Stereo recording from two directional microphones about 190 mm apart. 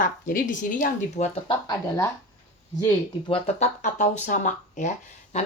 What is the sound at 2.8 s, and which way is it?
A woman's voice, 25° left (ahead or behind).